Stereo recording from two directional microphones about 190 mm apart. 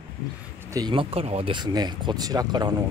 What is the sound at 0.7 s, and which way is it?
Speech, 20° right (ahead or behind).